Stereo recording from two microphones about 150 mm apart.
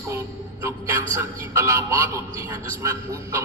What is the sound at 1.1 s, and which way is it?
A man's voice, 20° right (ahead or behind).